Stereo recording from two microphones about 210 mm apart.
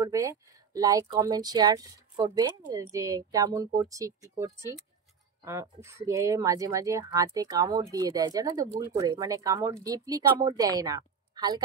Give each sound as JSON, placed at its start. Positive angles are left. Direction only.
{"t": 0.0, "sound": "speech", "side_deg": -15}